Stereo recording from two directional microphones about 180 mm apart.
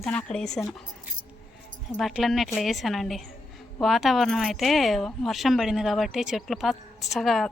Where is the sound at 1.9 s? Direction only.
Centre (ahead or behind).